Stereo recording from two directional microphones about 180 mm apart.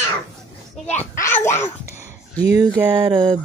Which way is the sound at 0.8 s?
10° left (ahead or behind).